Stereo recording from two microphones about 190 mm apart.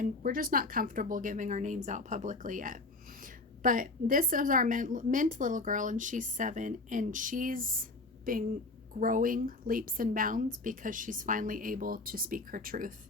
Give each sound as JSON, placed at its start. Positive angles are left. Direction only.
{"t": 0.0, "sound": "a woman's voice", "side_deg": -45}